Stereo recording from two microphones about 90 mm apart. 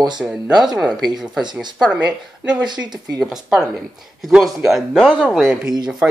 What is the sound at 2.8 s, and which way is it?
Speech, 50° right (ahead or behind).